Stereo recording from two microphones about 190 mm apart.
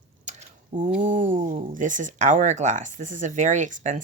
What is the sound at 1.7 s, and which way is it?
Speech, 40° right (ahead or behind).